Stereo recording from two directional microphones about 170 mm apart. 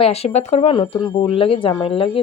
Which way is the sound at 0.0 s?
35° left (ahead or behind).